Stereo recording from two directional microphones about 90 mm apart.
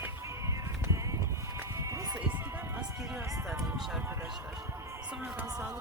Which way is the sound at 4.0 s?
25° right (ahead or behind).